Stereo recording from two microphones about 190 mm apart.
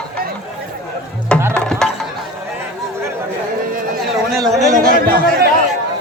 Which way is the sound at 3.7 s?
50° right (ahead or behind).